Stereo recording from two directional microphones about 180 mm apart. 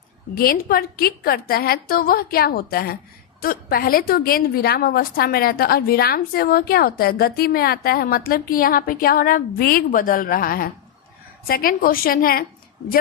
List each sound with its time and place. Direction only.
0.3 s a woman's voice: 55° left (ahead or behind)